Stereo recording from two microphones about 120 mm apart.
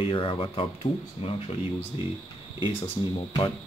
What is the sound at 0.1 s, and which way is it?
Speech, 45° left (ahead or behind).